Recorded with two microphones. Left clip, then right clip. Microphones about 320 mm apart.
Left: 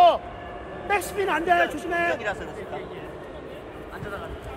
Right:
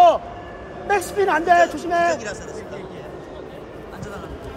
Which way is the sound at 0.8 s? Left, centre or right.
Right.